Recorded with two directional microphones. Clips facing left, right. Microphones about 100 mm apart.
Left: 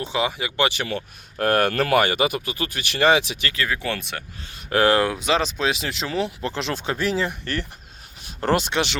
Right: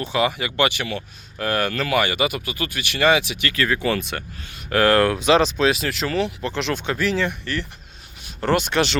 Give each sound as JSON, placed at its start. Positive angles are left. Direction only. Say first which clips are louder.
{"t": 0.1, "sound": "speech", "louder": "right 4 dB", "side_deg": 20}
{"t": 0.7, "sound": "speech", "louder": "even", "side_deg": 40}
{"t": 3.7, "sound": "speech", "louder": "right 5 dB", "side_deg": 0}
{"t": 4.7, "sound": "speech", "louder": "right 1 dB", "side_deg": 25}
{"t": 4.9, "sound": "speech", "louder": "right 4 dB", "side_deg": 5}
{"t": 5.6, "sound": "speech", "louder": "right 4 dB", "side_deg": 20}
{"t": 6.1, "sound": "speech", "louder": "right 2 dB", "side_deg": 35}
{"t": 8.2, "sound": "a sound", "louder": "right 1 dB", "side_deg": 35}
{"t": 8.7, "sound": "speech", "louder": "right 3 dB", "side_deg": 15}